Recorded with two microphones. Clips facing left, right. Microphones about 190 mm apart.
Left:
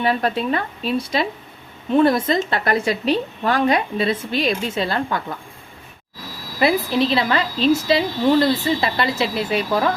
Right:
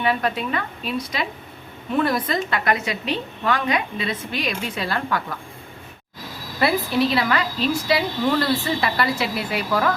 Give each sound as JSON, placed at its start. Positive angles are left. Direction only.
{"t": 0.0, "sound": "a woman's voice", "side_deg": 35}
{"t": 6.6, "sound": "a woman's voice", "side_deg": 20}